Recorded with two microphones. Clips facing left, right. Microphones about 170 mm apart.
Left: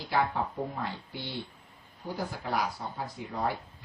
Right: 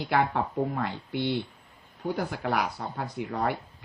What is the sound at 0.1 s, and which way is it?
Speech, 65° right (ahead or behind).